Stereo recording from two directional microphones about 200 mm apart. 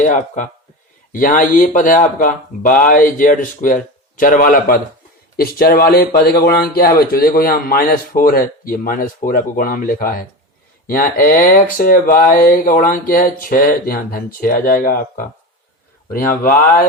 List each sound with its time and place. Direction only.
0.0 s speech: 40° left (ahead or behind)